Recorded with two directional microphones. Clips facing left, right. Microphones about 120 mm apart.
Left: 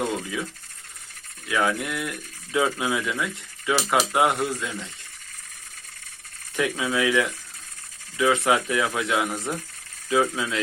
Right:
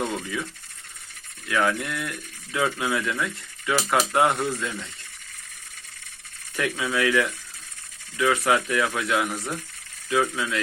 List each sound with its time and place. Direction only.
1.5 s speech: 15° left (ahead or behind)
6.6 s speech: 15° left (ahead or behind)